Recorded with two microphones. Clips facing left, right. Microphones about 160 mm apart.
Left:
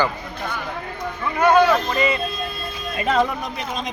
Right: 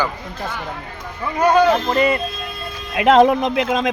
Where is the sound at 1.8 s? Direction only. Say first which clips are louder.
Right 4 dB; 55° right (ahead or behind).